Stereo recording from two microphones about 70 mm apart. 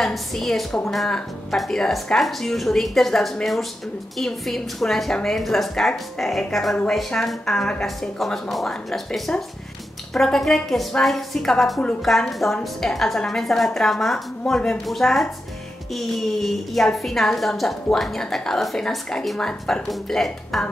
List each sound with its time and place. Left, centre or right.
0.0 s a woman's voice: centre